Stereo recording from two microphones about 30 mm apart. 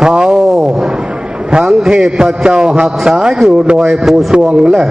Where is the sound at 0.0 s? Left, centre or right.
Right.